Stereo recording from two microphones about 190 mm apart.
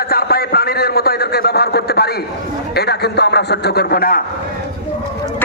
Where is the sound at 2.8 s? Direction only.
60° left (ahead or behind).